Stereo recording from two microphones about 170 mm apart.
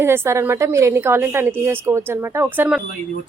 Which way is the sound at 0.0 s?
15° right (ahead or behind).